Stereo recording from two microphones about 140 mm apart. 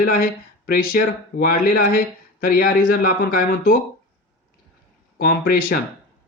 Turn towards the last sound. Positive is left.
turn(degrees=90)